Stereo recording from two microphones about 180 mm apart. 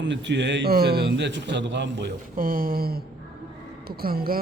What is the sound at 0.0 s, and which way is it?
Speech, 80° right.